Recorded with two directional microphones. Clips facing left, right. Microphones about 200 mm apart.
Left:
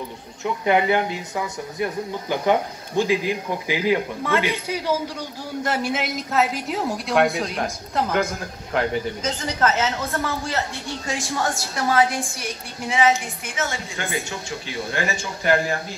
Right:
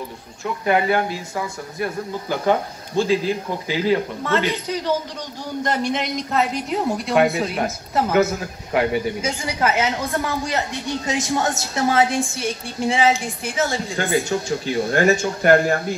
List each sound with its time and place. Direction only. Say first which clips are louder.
0.4 s a woman's voice: even; 20° left (ahead or behind); by 15.8 s 50° right (ahead or behind)